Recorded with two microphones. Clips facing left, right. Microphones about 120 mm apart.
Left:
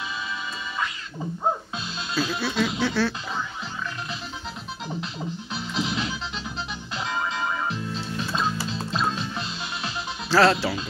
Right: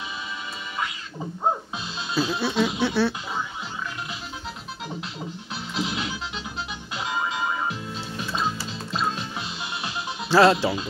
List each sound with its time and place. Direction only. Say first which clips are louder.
2.1 s speech: right 2 dB; 20° right (ahead or behind)
5.5 s music: even; 5° right (ahead or behind)